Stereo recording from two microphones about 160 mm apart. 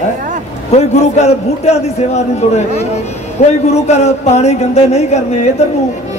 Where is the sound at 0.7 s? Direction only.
45° left (ahead or behind).